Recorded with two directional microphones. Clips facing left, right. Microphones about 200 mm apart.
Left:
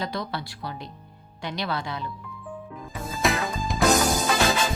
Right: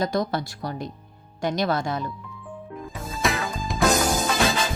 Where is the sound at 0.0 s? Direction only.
45° right (ahead or behind).